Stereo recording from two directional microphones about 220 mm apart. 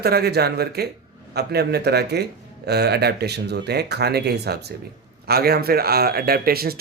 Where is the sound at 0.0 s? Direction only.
45° right (ahead or behind).